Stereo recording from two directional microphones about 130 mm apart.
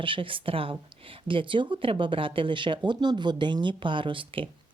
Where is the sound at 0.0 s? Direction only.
40° right (ahead or behind).